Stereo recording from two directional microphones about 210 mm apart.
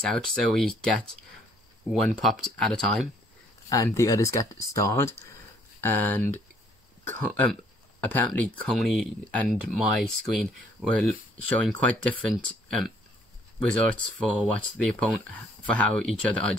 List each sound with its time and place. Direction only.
0.3 s speech: centre (ahead or behind)
3.6 s speech: 15° left (ahead or behind)
14.2 s speech: 5° left (ahead or behind)